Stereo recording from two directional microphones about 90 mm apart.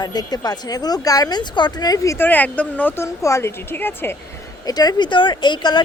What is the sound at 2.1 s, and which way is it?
Speech, 20° left (ahead or behind).